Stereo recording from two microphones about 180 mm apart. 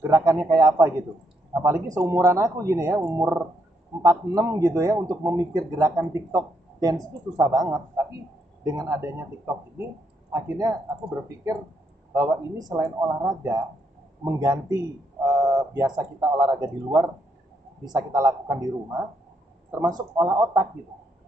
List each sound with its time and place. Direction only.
0.0 s a man's voice: 20° right (ahead or behind)
10.3 s speech: 20° right (ahead or behind)
11.0 s speech: 5° right (ahead or behind)
11.4 s a man's voice: 15° right (ahead or behind)